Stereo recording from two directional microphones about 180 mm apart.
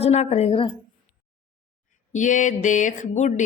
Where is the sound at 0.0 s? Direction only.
35° left (ahead or behind).